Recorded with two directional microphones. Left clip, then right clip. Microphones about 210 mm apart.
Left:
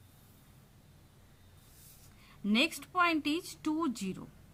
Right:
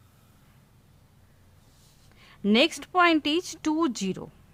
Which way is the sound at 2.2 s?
50° right (ahead or behind).